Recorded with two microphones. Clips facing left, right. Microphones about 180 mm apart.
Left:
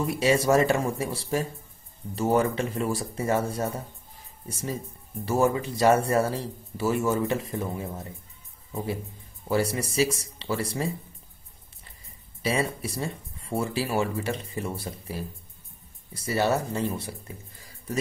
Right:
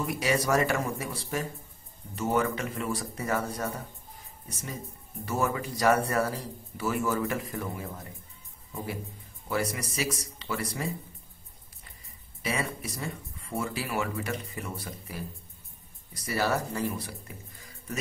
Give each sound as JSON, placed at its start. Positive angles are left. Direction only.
{"t": 0.0, "sound": "speech", "side_deg": 30}
{"t": 9.5, "sound": "speech", "side_deg": 30}
{"t": 12.4, "sound": "speech", "side_deg": 30}